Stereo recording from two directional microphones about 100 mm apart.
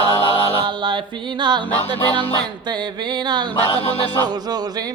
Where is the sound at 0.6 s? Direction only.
55° right (ahead or behind).